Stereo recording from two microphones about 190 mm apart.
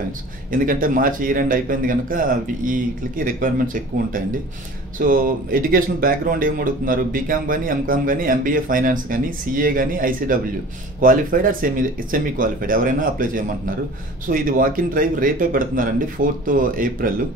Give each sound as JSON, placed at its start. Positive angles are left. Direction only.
{"t": 0.5, "sound": "speech", "side_deg": -45}